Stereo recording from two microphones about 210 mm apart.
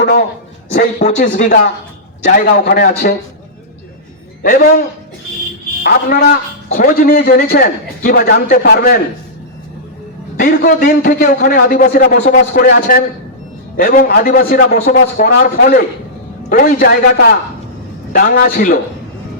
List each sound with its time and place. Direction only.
0.7 s a man's voice: 35° left (ahead or behind)
4.4 s a man's voice: 45° left (ahead or behind)
5.8 s a man's voice: 45° left (ahead or behind)
10.3 s a man's voice: 40° left (ahead or behind)